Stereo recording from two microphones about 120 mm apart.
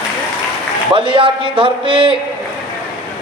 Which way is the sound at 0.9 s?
45° right (ahead or behind).